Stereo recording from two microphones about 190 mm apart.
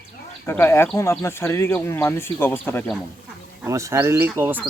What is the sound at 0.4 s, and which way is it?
Speech, 10° left (ahead or behind).